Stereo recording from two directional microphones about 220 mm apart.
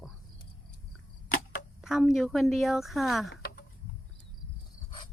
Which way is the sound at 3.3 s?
45° left (ahead or behind).